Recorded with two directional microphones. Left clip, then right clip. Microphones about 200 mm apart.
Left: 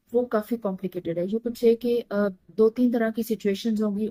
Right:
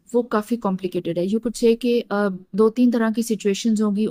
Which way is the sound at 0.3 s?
50° right (ahead or behind).